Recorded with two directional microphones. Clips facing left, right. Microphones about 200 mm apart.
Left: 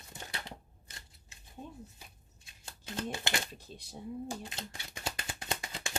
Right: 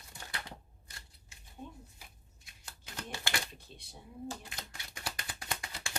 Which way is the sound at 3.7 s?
40° left (ahead or behind).